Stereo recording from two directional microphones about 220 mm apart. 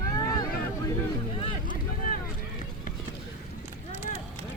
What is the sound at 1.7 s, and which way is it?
Boat, 40° left (ahead or behind).